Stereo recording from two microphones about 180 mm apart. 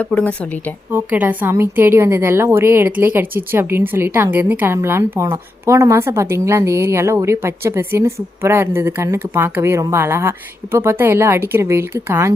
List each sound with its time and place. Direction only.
0.0 s speech: 5° left (ahead or behind)
0.9 s a woman's voice: 10° right (ahead or behind)